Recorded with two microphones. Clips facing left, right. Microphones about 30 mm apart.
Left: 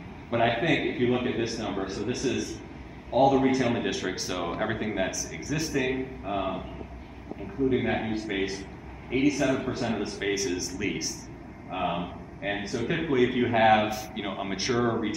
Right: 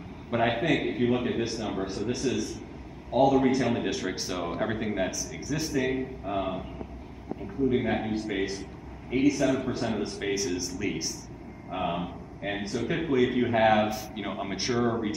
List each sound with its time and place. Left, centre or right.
0.3 s a man's voice: centre
7.7 s a man's voice: centre
11.7 s a man's voice: centre
14.5 s speech: centre